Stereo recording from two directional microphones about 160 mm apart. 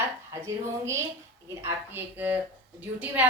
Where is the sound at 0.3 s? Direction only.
20° right (ahead or behind).